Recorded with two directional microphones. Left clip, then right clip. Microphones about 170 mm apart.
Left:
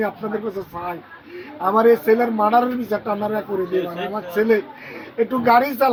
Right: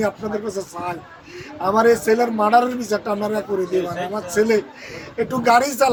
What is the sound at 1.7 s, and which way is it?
Speech, 35° right (ahead or behind).